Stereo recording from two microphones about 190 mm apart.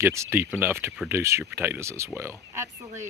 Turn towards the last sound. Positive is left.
turn(degrees=-15)  # may be behind; listen again after turning